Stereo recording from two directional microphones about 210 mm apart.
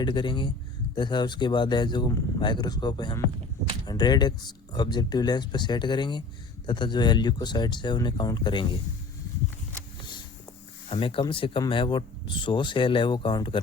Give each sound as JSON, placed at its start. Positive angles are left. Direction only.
{"t": 0.0, "sound": "speech", "side_deg": 20}
{"t": 10.8, "sound": "speech", "side_deg": 25}